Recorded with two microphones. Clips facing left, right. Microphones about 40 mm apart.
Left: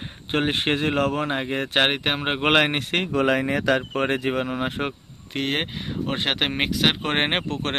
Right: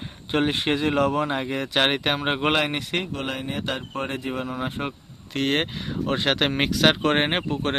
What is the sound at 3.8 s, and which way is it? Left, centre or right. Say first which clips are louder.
Speech: left 5 dB; left.